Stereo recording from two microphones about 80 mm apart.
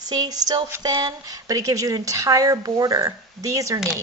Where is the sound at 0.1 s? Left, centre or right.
Right.